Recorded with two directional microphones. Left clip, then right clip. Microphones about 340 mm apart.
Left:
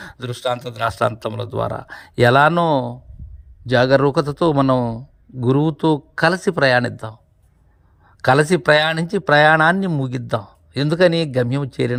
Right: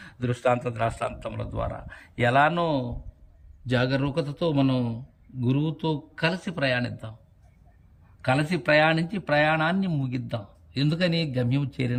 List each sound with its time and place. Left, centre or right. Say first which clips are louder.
0.0 s a man's voice: left 2 dB; centre
3.7 s a man's voice: left 12 dB; centre
8.2 s a man's voice: left 11 dB; centre